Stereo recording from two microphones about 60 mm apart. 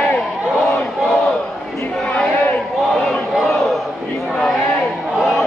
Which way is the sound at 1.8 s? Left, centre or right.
Centre.